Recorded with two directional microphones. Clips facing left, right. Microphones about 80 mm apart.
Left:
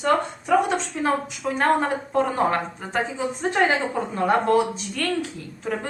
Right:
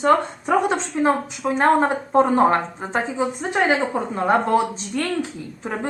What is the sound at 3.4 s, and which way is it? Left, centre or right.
A woman's voice, centre.